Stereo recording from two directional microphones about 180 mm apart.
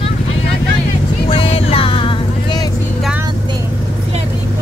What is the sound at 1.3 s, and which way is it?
Vehicle, 30° left (ahead or behind).